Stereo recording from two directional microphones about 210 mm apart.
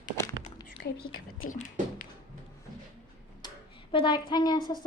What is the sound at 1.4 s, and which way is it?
Speech, 35° left (ahead or behind).